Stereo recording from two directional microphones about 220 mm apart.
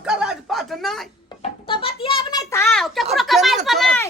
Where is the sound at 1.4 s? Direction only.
25° left (ahead or behind).